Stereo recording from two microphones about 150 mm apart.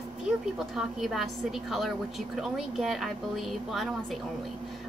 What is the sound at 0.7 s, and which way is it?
A woman's voice, centre (ahead or behind).